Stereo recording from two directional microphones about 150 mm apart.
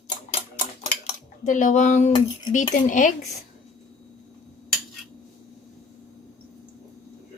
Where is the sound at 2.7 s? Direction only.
55° left (ahead or behind).